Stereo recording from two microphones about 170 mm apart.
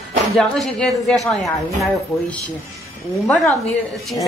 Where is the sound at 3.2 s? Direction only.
Centre (ahead or behind).